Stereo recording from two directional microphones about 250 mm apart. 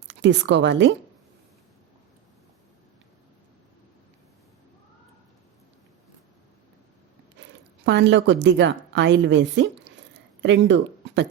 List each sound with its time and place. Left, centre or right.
0.1 s a woman's voice: right
7.9 s a woman's voice: right